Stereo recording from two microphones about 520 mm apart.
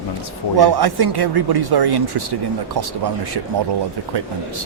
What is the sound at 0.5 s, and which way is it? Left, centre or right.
A man's voice, right.